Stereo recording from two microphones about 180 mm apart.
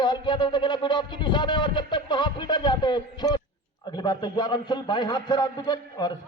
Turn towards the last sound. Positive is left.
turn(degrees=25)  # may be behind; listen again after turning